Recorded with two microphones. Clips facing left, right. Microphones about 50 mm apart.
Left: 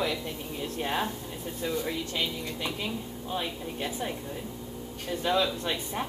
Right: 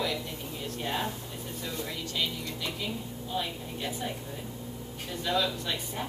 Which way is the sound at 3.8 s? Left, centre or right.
Left.